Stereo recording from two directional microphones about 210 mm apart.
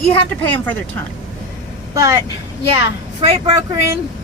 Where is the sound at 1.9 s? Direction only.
15° right (ahead or behind).